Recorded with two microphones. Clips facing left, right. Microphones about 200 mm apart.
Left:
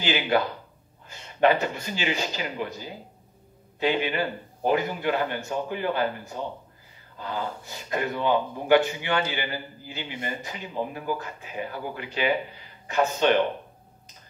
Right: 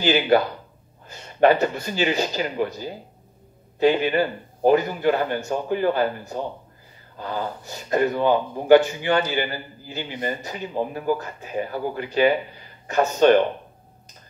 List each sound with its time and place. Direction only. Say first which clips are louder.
0.0 s a man's voice: right 6 dB; 40° right (ahead or behind)